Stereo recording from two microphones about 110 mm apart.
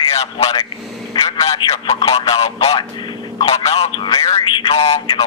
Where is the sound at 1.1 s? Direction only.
30° left (ahead or behind).